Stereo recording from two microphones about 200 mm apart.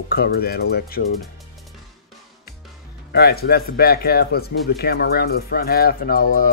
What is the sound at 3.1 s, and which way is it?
Speech, 50° left (ahead or behind).